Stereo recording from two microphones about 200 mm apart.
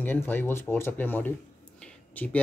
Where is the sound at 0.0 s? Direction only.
10° left (ahead or behind).